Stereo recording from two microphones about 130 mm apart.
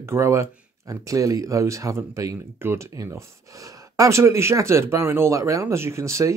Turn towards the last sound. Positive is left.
turn(degrees=-20)  # may be behind; listen again after turning